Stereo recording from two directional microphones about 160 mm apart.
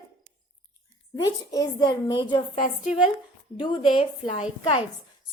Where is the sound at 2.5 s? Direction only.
45° left (ahead or behind).